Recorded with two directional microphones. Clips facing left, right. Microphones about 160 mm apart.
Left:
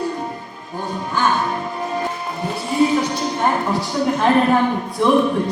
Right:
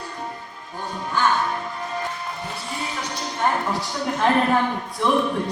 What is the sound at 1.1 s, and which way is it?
Music, 10° left (ahead or behind).